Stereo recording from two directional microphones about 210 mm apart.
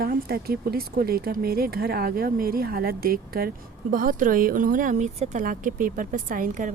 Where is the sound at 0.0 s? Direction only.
45° right (ahead or behind).